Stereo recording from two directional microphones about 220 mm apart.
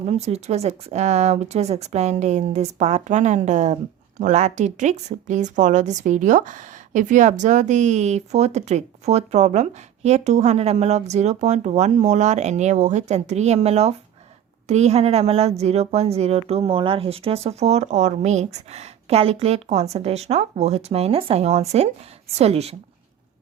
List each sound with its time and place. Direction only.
0.0 s a woman's voice: 30° right (ahead or behind)